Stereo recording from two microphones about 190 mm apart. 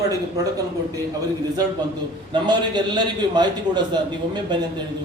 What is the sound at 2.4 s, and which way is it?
A man's voice, 25° right (ahead or behind).